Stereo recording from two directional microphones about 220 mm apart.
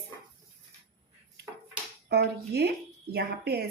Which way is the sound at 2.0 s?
45° right (ahead or behind).